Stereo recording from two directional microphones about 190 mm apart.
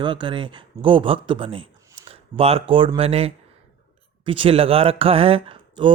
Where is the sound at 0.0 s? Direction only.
25° right (ahead or behind).